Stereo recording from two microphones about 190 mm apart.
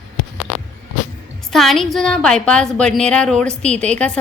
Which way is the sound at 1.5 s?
Centre (ahead or behind).